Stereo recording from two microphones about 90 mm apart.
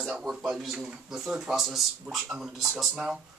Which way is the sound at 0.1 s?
Centre (ahead or behind).